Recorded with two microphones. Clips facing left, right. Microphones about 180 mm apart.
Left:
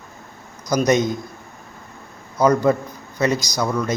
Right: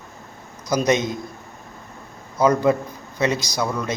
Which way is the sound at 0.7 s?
25° right (ahead or behind).